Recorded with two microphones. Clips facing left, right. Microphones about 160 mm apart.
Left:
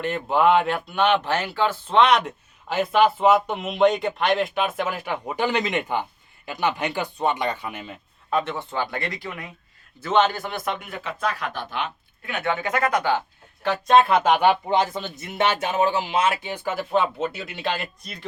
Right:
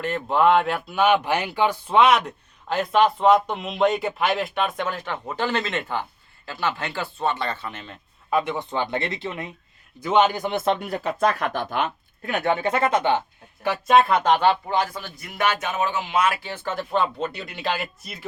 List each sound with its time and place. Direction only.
0.0 s speech: centre (ahead or behind)
8.3 s speech: 10° right (ahead or behind)
10.0 s a man's voice: 15° right (ahead or behind)
10.7 s speech: 35° right (ahead or behind)
13.6 s speech: 5° right (ahead or behind)
14.3 s speech: 15° left (ahead or behind); by 18.3 s 5° right (ahead or behind)